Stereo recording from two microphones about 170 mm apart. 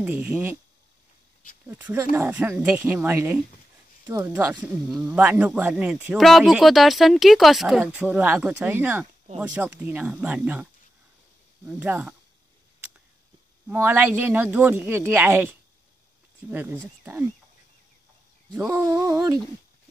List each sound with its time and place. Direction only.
0.0 s speech: 10° right (ahead or behind)
1.7 s speech: 10° right (ahead or behind)
13.7 s speech: 10° right (ahead or behind)
18.7 s a sound: 20° right (ahead or behind)